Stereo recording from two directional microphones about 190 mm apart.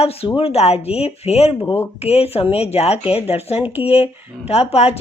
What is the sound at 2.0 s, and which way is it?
Speech, 30° left (ahead or behind).